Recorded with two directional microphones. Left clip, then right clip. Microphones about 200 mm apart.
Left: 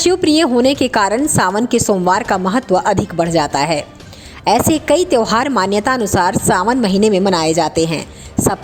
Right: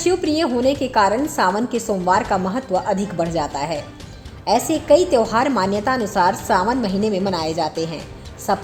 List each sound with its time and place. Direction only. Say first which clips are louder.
0.0 s a woman's voice: left 6 dB; 30° left (ahead or behind)